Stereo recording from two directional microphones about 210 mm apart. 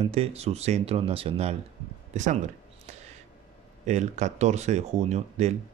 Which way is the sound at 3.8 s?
35° right (ahead or behind).